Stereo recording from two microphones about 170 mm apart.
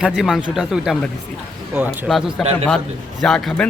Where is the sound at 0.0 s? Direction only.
Centre (ahead or behind).